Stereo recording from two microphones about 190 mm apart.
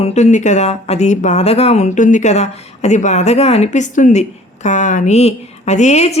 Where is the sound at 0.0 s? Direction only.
35° left (ahead or behind).